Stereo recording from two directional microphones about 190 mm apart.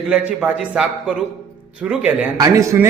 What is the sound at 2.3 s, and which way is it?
Speech, 15° right (ahead or behind).